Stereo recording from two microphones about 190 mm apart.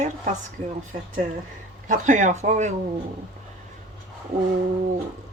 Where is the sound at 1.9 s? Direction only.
40° right (ahead or behind).